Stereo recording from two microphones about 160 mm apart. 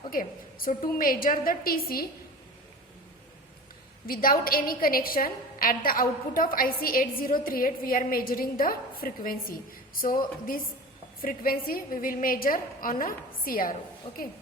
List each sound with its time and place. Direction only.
0.1 s a woman's voice: 60° left (ahead or behind)
4.0 s a woman's voice: 65° left (ahead or behind)